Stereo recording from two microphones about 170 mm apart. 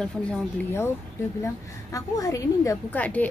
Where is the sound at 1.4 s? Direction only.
20° left (ahead or behind).